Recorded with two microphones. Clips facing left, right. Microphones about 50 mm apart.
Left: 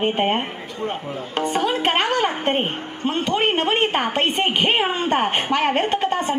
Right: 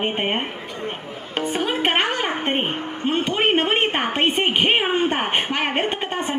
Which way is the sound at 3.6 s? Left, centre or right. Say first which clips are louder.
Left 1 dB; right.